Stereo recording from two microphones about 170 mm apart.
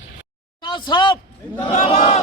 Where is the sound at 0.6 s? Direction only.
25° left (ahead or behind).